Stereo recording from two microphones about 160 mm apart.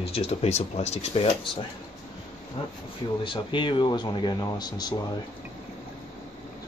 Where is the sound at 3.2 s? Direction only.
30° left (ahead or behind).